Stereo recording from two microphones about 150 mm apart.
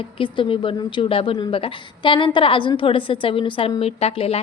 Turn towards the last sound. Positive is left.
turn(degrees=40)  # may be behind; listen again after turning